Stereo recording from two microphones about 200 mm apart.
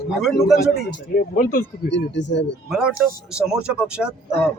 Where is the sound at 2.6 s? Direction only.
Centre (ahead or behind).